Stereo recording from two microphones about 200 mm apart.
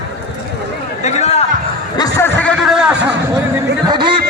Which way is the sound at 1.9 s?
20° left (ahead or behind).